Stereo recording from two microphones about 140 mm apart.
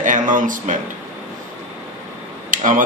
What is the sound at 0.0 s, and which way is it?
Speech, 65° right (ahead or behind).